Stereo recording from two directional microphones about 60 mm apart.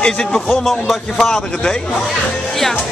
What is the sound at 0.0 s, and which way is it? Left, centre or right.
Speech, centre.